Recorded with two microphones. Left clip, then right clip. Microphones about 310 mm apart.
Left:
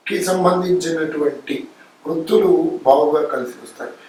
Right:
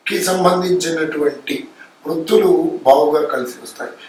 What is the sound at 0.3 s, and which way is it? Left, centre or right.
Speech, centre.